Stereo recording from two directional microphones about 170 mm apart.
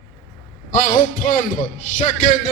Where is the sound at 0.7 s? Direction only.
50° left (ahead or behind).